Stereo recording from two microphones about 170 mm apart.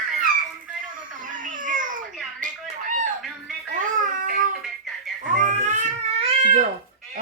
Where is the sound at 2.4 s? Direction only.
50° right (ahead or behind).